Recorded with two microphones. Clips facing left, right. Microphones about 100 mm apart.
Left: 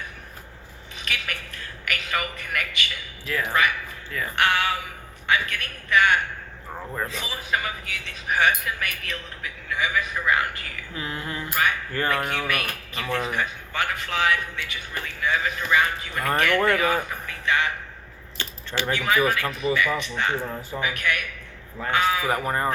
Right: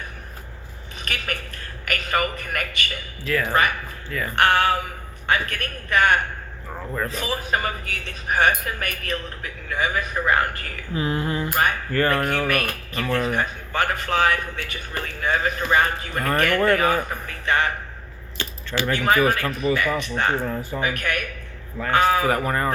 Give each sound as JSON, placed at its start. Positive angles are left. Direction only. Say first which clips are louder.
{"t": 1.0, "sound": "a sound", "louder": "right 2 dB", "side_deg": -45}
{"t": 3.2, "sound": "speech", "louder": "right 4 dB", "side_deg": 5}
{"t": 3.5, "sound": "speech", "louder": "right 1 dB", "side_deg": -45}
{"t": 4.1, "sound": "speech", "louder": "right 3 dB", "side_deg": 0}
{"t": 4.4, "sound": "a man's voice", "louder": "right 5 dB", "side_deg": -45}
{"t": 10.9, "sound": "a sound", "louder": "right 8 dB", "side_deg": -25}
{"t": 11.4, "sound": "speech", "louder": "left 2 dB", "side_deg": -45}
{"t": 18.9, "sound": "speech", "louder": "right 3 dB", "side_deg": -45}
{"t": 22.4, "sound": "speech", "louder": "right 1 dB", "side_deg": 10}